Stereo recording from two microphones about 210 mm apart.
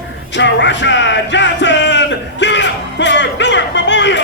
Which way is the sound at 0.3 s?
60° left (ahead or behind).